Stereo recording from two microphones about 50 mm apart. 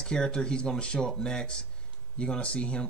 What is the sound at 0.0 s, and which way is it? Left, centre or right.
Speech, centre.